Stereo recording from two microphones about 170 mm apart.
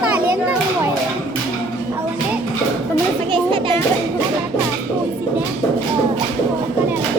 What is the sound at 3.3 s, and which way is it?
Speech, 30° right (ahead or behind).